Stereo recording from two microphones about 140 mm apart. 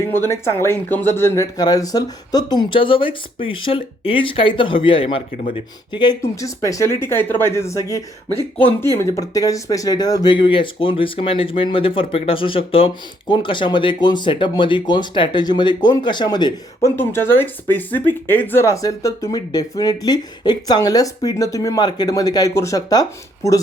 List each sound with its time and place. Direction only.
0.0 s speech: 15° left (ahead or behind)
16.9 s speech: 15° left (ahead or behind)